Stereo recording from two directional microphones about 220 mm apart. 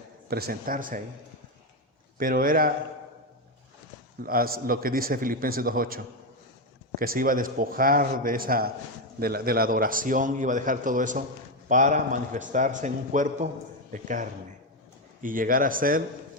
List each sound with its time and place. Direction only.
0.3 s a man's voice: 45° right (ahead or behind)
2.1 s a man's voice: 40° right (ahead or behind)
4.2 s a man's voice: 40° right (ahead or behind)